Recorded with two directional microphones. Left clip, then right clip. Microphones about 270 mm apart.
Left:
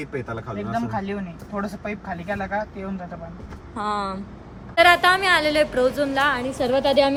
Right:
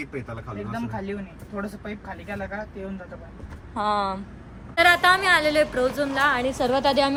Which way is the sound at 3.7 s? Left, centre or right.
Centre.